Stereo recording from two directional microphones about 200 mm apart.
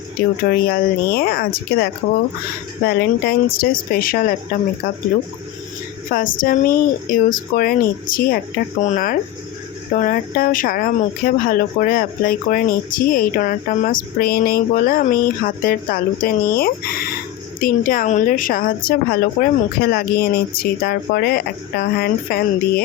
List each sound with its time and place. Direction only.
0.7 s speech: 50° left (ahead or behind)
6.1 s speech: 45° left (ahead or behind)